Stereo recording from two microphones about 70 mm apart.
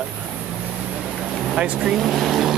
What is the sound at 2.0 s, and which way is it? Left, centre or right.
Speech, centre.